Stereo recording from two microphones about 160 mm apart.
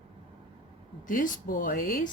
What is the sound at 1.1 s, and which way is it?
Speech, 60° left (ahead or behind).